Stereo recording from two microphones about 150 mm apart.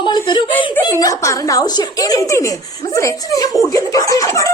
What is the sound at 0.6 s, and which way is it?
A woman's voice, 25° left (ahead or behind).